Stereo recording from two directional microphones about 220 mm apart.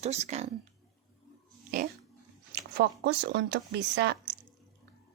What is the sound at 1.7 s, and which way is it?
Dog, 35° right (ahead or behind).